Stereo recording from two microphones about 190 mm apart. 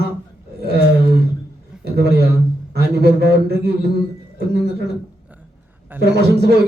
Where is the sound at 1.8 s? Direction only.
55° right (ahead or behind).